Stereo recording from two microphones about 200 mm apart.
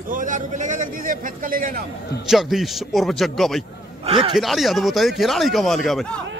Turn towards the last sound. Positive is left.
turn(degrees=0)  # may be behind; listen again after turning